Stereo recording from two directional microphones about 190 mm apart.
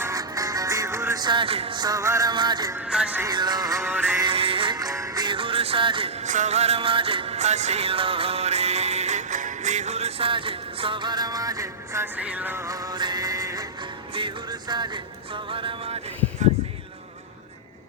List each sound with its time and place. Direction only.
0.0 s music: 15° right (ahead or behind)
2.7 s music: 5° right (ahead or behind)
3.2 s music: 20° right (ahead or behind)
4.3 s music: 30° right (ahead or behind)